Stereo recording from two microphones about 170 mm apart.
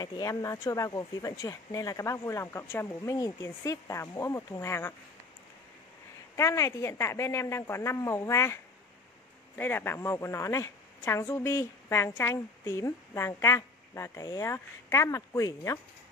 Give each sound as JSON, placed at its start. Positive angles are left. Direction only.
{"t": 0.0, "sound": "speech", "side_deg": 20}
{"t": 6.3, "sound": "speech", "side_deg": 15}
{"t": 9.6, "sound": "speech", "side_deg": 10}